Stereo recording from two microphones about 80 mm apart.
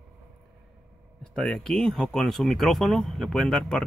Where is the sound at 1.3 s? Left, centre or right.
Centre.